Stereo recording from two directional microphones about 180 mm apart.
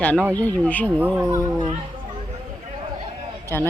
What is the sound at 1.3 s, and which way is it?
Speech, 25° right (ahead or behind).